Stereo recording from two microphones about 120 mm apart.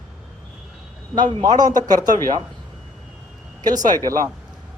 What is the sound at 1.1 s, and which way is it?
Speech, 40° right (ahead or behind).